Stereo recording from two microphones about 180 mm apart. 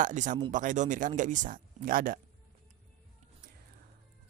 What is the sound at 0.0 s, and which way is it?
Speech, 45° right (ahead or behind).